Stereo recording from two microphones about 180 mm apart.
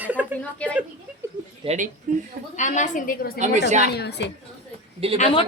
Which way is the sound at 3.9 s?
65° left (ahead or behind).